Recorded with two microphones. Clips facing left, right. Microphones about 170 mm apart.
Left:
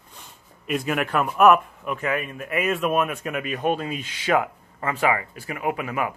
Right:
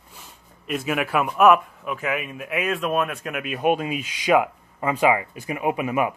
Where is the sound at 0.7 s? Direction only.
5° right (ahead or behind).